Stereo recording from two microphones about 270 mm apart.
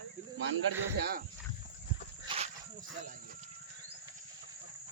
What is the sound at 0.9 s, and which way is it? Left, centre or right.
Speech, right.